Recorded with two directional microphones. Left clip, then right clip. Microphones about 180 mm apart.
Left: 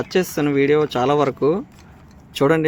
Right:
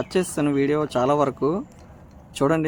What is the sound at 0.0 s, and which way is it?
Speech, 10° left (ahead or behind).